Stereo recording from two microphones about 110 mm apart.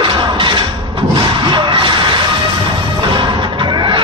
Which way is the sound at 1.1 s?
45° right (ahead or behind).